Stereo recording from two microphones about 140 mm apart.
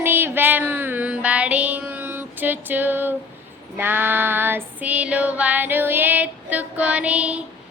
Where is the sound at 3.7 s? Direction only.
15° right (ahead or behind).